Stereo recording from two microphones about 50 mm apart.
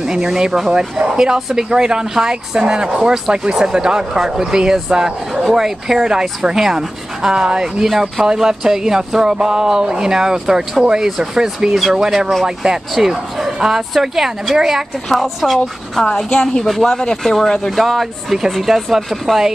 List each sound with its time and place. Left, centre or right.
0.0 s speech: centre
15.6 s speech: centre